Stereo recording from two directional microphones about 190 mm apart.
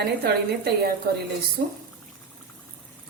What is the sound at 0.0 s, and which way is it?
Speech, 55° right (ahead or behind).